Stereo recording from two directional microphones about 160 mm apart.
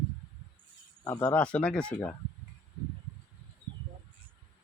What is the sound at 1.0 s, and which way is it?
Speech, 15° left (ahead or behind).